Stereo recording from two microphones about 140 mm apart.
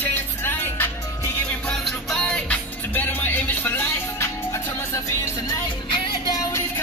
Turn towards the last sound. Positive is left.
turn(degrees=25)  # may be behind; listen again after turning